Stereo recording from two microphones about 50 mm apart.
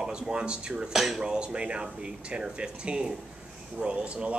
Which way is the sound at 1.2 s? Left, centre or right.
Centre.